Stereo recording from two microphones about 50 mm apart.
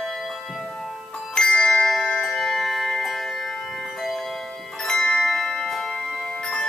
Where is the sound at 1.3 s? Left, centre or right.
Centre.